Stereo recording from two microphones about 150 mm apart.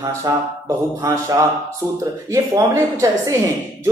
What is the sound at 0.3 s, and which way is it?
Speech, 25° right (ahead or behind).